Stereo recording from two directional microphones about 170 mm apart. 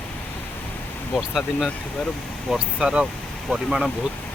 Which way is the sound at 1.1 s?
Centre (ahead or behind).